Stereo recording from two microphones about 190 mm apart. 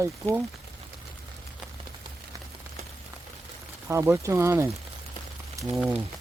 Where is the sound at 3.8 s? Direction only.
15° right (ahead or behind).